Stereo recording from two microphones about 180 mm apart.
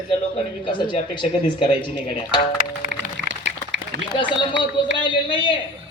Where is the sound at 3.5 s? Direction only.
80° right.